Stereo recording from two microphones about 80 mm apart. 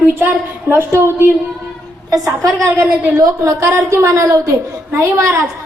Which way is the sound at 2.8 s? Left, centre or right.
Right.